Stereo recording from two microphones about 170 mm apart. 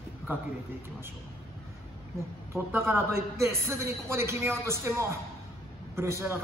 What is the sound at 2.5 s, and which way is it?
A man's voice, 15° right (ahead or behind).